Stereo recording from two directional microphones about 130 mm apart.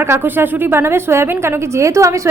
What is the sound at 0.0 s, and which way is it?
A woman's voice, 20° right (ahead or behind).